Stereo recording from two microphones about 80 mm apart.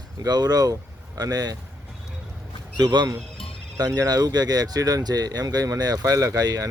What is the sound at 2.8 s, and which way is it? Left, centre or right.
Speech, right.